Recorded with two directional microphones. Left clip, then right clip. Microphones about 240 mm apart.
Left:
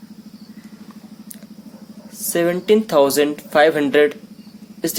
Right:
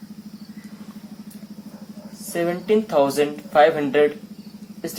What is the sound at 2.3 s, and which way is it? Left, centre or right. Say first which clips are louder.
Speech: left 5 dB; left.